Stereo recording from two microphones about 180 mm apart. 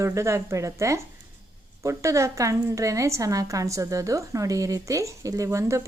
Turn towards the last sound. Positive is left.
turn(degrees=-15)  # may be behind; listen again after turning